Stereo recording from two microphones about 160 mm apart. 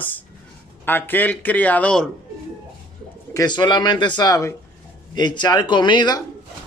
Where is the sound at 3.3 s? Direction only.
25° left (ahead or behind).